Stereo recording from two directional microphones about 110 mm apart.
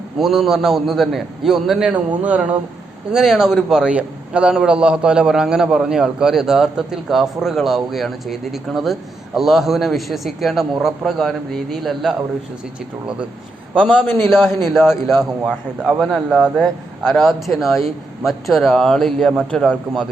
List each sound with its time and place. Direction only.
0.2 s a man's voice: 5° right (ahead or behind)
13.8 s a man's voice: 5° right (ahead or behind)